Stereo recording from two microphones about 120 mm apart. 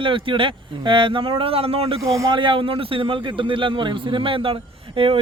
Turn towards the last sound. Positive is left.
turn(degrees=-50)  # may be behind; listen again after turning